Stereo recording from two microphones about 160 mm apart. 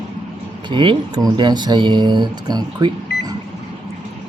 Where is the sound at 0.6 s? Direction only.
30° right (ahead or behind).